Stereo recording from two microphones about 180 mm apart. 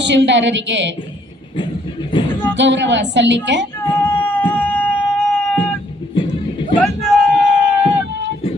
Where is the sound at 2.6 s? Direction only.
85° right.